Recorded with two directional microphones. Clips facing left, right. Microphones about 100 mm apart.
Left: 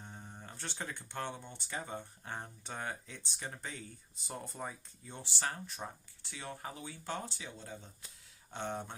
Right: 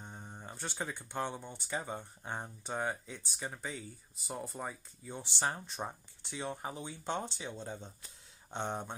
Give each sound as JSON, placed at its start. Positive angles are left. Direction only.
{"t": 0.0, "sound": "speech", "side_deg": -20}
{"t": 5.3, "sound": "speech", "side_deg": -25}